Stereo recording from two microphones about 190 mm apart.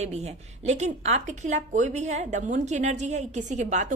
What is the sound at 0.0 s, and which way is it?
A woman's voice, 35° right (ahead or behind).